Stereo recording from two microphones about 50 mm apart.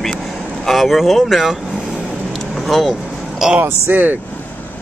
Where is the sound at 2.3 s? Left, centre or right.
Centre.